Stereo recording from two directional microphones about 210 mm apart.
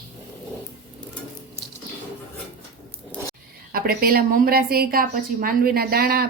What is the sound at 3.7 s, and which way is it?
A woman's voice, 45° right (ahead or behind).